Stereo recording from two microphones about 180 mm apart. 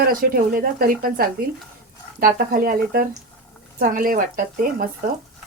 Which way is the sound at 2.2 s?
55° right (ahead or behind).